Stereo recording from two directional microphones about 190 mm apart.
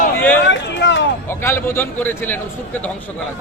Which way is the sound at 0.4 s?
70° left (ahead or behind).